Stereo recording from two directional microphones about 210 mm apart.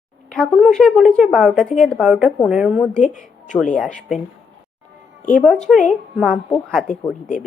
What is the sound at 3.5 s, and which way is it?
Speech, 5° left (ahead or behind).